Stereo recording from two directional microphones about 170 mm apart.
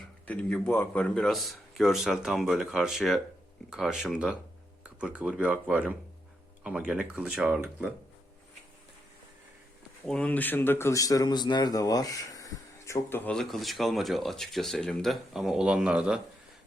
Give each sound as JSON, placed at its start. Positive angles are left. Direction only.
{"t": 0.3, "sound": "speech", "side_deg": 5}
{"t": 10.1, "sound": "speech", "side_deg": 5}